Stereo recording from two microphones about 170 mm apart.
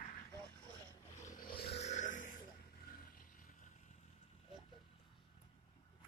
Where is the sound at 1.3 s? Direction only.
60° left (ahead or behind).